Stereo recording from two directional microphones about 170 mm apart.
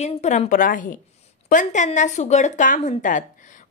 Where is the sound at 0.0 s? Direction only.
40° left (ahead or behind).